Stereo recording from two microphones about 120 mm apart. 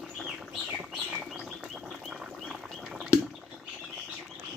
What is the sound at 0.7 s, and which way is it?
Chirp, 10° right (ahead or behind).